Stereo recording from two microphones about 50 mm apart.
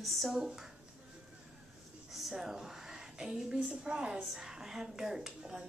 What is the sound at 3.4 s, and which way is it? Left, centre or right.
A woman's voice, centre.